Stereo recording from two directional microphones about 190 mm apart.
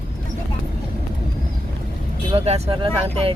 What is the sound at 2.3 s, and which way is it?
Speech, 35° right (ahead or behind).